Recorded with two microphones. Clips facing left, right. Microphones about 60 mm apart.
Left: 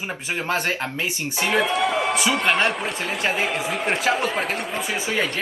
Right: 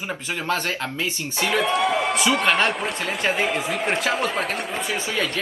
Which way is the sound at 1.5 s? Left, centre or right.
Centre.